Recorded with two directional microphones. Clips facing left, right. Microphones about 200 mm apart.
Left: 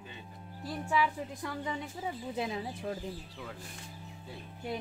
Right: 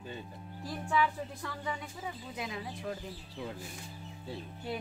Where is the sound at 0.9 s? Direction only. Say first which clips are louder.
Even; 10° left (ahead or behind).